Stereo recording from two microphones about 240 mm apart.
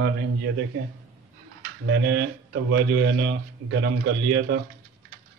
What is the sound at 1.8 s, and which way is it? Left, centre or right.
Speech, right.